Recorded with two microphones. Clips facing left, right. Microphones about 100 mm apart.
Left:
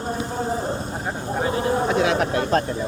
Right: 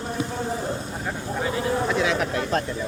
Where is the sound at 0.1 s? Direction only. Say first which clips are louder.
Left 3 dB; 35° left (ahead or behind).